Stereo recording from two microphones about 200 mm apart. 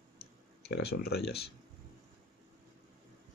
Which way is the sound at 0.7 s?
55° left (ahead or behind).